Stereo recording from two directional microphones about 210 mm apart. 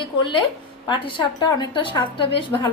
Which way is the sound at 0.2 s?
25° left (ahead or behind).